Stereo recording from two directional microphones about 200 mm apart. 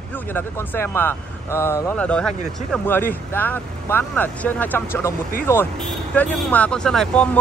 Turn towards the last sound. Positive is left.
turn(degrees=5)  # may be behind; listen again after turning